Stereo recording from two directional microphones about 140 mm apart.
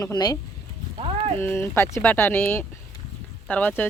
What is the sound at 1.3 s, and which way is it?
Speech, 15° left (ahead or behind).